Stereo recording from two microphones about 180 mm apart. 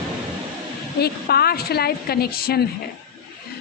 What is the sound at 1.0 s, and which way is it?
A woman's voice, 60° left (ahead or behind).